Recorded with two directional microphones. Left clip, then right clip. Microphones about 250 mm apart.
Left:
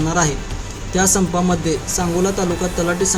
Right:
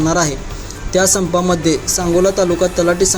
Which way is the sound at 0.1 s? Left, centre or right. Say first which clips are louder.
Right 3 dB; centre.